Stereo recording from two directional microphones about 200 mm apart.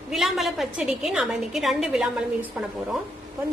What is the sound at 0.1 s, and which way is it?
A woman's voice, centre (ahead or behind).